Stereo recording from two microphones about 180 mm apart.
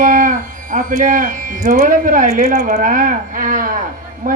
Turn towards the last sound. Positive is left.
turn(degrees=-50)  # may be behind; listen again after turning